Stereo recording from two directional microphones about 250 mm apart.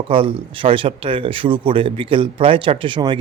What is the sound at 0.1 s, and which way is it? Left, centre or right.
Speech, right.